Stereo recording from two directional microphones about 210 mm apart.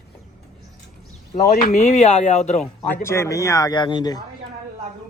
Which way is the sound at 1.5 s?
35° left (ahead or behind).